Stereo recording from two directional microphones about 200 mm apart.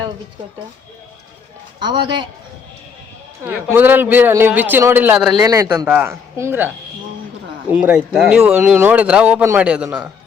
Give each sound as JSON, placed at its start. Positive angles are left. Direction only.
{"t": 1.8, "sound": "a man's voice", "side_deg": -20}
{"t": 3.4, "sound": "speech", "side_deg": -10}
{"t": 5.4, "sound": "speech", "side_deg": -20}